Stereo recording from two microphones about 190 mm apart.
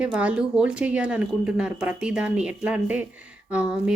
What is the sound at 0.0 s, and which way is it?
Speech, 5° right (ahead or behind).